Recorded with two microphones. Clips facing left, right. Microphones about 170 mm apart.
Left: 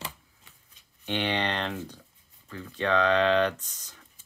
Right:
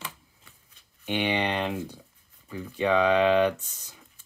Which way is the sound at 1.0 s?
10° right (ahead or behind).